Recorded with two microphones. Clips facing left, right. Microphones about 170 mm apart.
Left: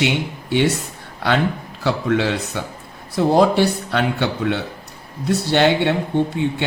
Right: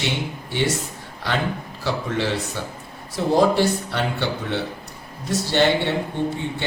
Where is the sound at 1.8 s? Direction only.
60° left (ahead or behind).